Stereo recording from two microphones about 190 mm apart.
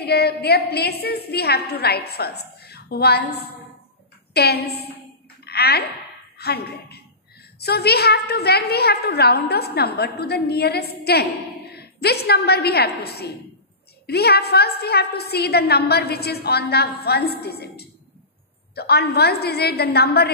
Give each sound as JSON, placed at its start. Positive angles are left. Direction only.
{"t": 0.0, "sound": "a woman's voice", "side_deg": 55}
{"t": 5.4, "sound": "a sound", "side_deg": 55}
{"t": 6.3, "sound": "a woman's voice", "side_deg": 55}